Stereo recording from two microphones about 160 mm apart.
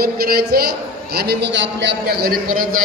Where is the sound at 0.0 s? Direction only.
70° right (ahead or behind).